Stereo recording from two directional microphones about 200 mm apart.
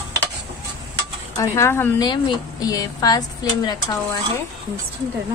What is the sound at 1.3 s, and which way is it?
A woman's voice, 15° left (ahead or behind).